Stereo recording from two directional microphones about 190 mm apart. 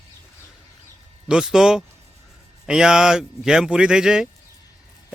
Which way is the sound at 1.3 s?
5° right (ahead or behind).